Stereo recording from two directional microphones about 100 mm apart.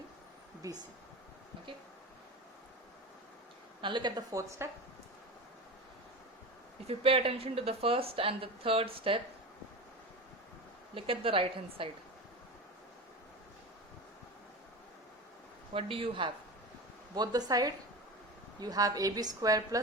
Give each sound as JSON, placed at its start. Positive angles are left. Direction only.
{"t": 0.6, "sound": "speech", "side_deg": -40}
{"t": 3.8, "sound": "speech", "side_deg": -50}
{"t": 4.4, "sound": "a woman's voice", "side_deg": -30}
{"t": 6.8, "sound": "a woman's voice", "side_deg": -70}
{"t": 10.9, "sound": "a woman's voice", "side_deg": -65}
{"t": 15.7, "sound": "a woman's voice", "side_deg": -65}
{"t": 17.2, "sound": "a woman's voice", "side_deg": -40}